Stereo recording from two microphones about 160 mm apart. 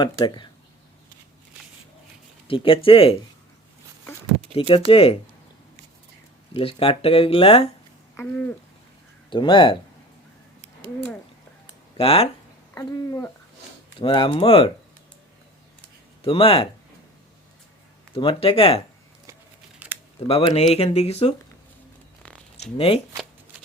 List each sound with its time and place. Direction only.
0.0 s speech: 30° left (ahead or behind)
2.5 s speech: 35° left (ahead or behind)
4.5 s speech: 35° left (ahead or behind)
6.5 s speech: 35° left (ahead or behind)
8.1 s speech: 10° left (ahead or behind)
9.3 s speech: 30° left (ahead or behind)
11.9 s speech: 35° left (ahead or behind)
12.7 s speech: 20° left (ahead or behind)
14.0 s speech: 30° left (ahead or behind)
16.2 s speech: 35° left (ahead or behind)
18.1 s speech: 35° left (ahead or behind)
19.8 s typing: 10° right (ahead or behind)
20.1 s speech: 35° left (ahead or behind)
22.6 s speech: 35° left (ahead or behind)